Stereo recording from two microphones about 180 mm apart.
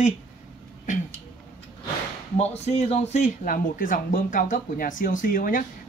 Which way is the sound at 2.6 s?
40° left (ahead or behind).